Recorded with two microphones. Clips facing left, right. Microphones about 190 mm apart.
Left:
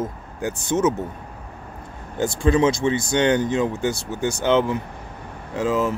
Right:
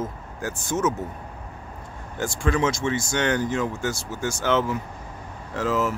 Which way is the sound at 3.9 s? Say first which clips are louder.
Left 4 dB; 60° left (ahead or behind).